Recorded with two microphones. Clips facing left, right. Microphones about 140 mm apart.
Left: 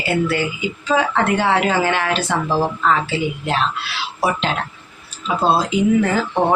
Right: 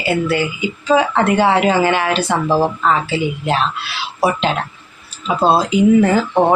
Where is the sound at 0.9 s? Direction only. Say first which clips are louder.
Right 4 dB; 10° right (ahead or behind).